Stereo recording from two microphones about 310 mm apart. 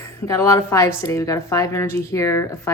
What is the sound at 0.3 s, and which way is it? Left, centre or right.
A woman's voice, centre.